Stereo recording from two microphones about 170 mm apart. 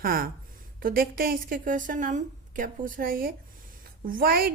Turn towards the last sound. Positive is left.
turn(degrees=-60)  # may be behind; listen again after turning